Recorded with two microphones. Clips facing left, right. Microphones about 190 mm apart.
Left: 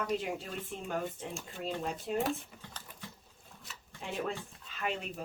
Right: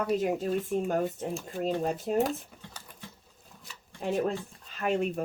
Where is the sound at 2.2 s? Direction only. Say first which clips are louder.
Right 3 dB; centre (ahead or behind).